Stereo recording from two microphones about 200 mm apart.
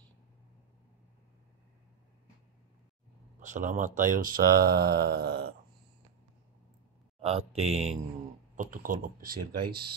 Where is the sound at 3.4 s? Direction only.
40° right (ahead or behind).